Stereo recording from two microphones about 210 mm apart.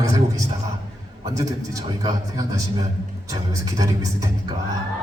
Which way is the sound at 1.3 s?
15° right (ahead or behind).